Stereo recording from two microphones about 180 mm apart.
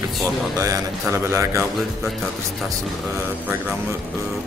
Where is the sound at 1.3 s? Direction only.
15° right (ahead or behind).